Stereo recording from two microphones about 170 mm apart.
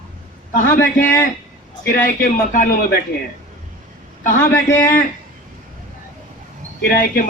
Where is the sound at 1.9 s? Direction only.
55° left (ahead or behind).